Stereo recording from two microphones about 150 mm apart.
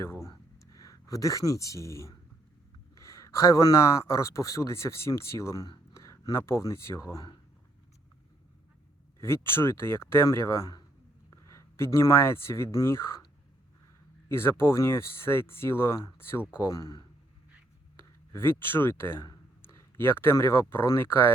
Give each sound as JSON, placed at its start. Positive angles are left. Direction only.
{"t": 0.0, "sound": "a sound", "side_deg": 20}
{"t": 2.9, "sound": "speech", "side_deg": 20}
{"t": 9.2, "sound": "speech", "side_deg": 15}
{"t": 14.3, "sound": "speech", "side_deg": 15}
{"t": 18.3, "sound": "speech", "side_deg": 15}